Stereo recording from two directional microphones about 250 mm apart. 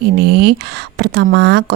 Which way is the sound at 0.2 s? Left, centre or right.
Right.